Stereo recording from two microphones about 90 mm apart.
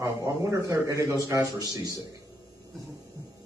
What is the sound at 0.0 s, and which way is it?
Speech, 40° right (ahead or behind).